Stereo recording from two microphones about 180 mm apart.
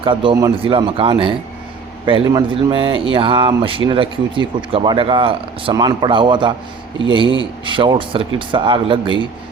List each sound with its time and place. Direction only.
0.0 s a man's voice: 30° right (ahead or behind)